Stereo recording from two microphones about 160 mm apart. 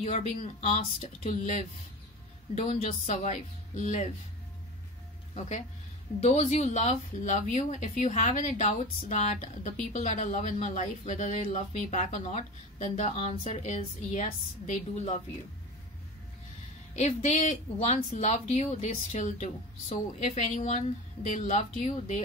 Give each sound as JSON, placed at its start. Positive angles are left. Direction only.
{"t": 0.0, "sound": "speech", "side_deg": 45}
{"t": 6.2, "sound": "a woman's voice", "side_deg": 45}
{"t": 16.9, "sound": "speech", "side_deg": 45}